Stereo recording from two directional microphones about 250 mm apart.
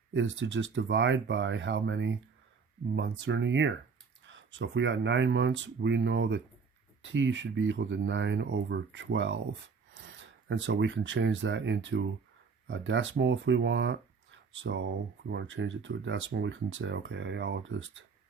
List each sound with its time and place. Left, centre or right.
0.1 s speech: right